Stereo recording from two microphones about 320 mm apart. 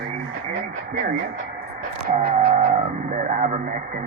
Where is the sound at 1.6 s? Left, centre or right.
Right.